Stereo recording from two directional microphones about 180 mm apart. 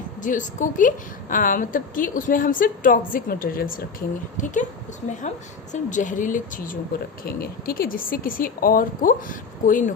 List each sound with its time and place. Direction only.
0.2 s a woman's voice: 45° left (ahead or behind)
5.7 s a woman's voice: 45° left (ahead or behind)